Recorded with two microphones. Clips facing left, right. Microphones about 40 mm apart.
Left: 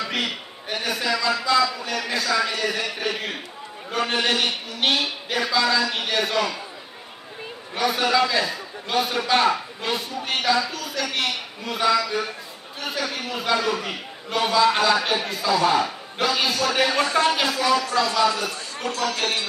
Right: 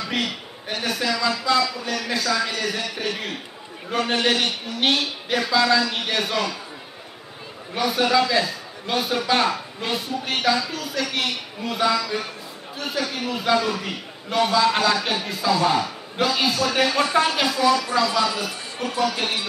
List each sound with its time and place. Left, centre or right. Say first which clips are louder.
0.0 s a man's voice: even; centre
7.7 s a man's voice: right 1 dB; centre